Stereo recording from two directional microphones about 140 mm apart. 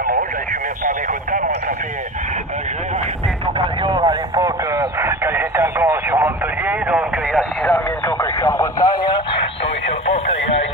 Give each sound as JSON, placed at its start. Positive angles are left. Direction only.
{"t": 3.5, "sound": "radio", "side_deg": -35}
{"t": 8.2, "sound": "radio", "side_deg": 15}